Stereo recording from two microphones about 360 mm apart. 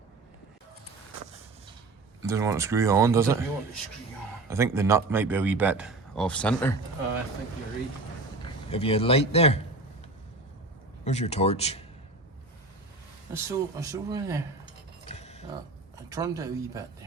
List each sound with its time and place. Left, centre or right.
2.2 s speech: centre
4.4 s a man's voice: centre
8.7 s speech: centre
11.0 s speech: centre
13.3 s speech: centre
15.1 s a sound: centre
16.0 s speech: centre